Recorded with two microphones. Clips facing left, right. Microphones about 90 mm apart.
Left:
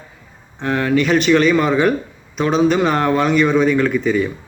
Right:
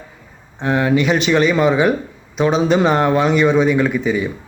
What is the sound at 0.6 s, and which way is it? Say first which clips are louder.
A man's voice: right 1 dB; 15° right (ahead or behind).